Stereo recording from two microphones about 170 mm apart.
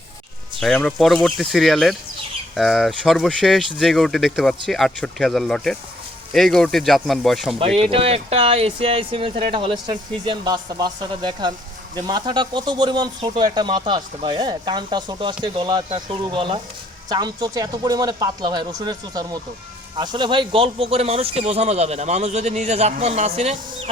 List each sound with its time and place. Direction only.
0.6 s speech: 5° left (ahead or behind)
7.8 s speech: 35° right (ahead or behind)